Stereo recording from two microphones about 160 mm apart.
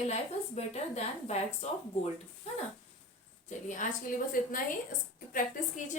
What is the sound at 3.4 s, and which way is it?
A woman's voice, 50° left (ahead or behind).